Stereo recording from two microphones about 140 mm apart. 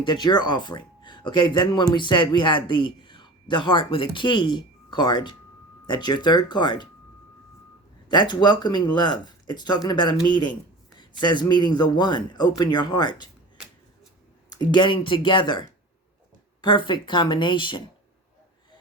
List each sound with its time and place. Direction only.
0.0 s speech: 30° left (ahead or behind)
8.0 s speech: 30° left (ahead or behind)
14.5 s speech: 30° left (ahead or behind)